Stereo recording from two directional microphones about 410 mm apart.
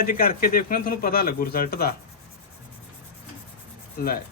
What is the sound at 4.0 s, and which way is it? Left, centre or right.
Speech, left.